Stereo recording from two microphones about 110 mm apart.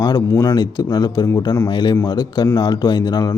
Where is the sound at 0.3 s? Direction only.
35° left (ahead or behind).